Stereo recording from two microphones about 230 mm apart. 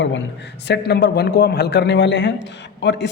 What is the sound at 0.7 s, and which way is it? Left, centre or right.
Speech, left.